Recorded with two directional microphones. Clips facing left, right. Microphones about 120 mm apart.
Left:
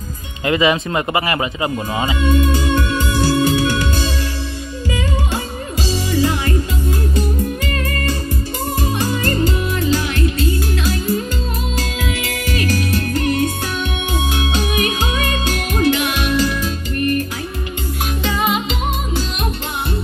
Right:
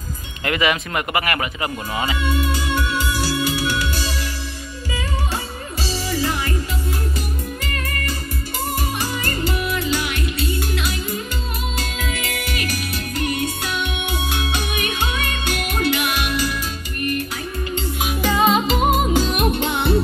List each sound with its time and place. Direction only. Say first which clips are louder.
0.5 s speech: left 5 dB; 25° left (ahead or behind)
3.3 s music: left 6 dB; 25° left (ahead or behind)
5.9 s music: left 5 dB; 15° left (ahead or behind)
9.2 s music: left 5 dB; 40° left (ahead or behind)
12.0 s music: left 4 dB; 35° left (ahead or behind)
14.7 s music: left 4 dB; 40° left (ahead or behind)
18.4 s music: right 4 dB; 35° right (ahead or behind)